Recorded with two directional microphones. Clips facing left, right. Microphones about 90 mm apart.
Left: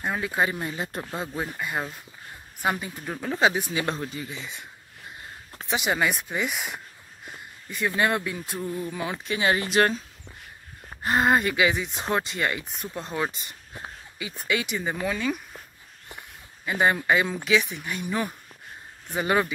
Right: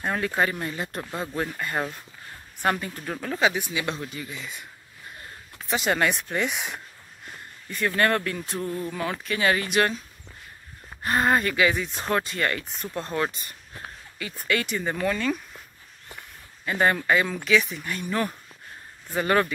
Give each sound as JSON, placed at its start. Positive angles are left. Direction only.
{"t": 0.0, "sound": "speech", "side_deg": 5}
{"t": 0.5, "sound": "speech", "side_deg": 20}
{"t": 3.4, "sound": "speech", "side_deg": 30}
{"t": 5.7, "sound": "speech", "side_deg": 15}
{"t": 11.0, "sound": "speech", "side_deg": 20}